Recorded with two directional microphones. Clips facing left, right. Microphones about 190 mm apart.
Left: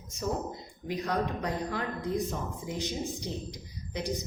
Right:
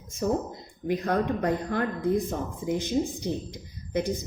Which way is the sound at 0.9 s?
55° right (ahead or behind).